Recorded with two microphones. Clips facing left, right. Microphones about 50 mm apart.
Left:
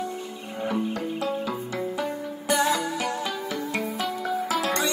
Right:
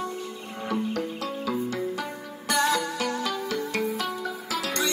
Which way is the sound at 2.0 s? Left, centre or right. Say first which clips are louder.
Left 4 dB; centre.